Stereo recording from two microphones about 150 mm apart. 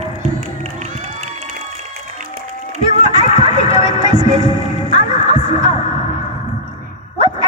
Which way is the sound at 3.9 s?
25° right (ahead or behind).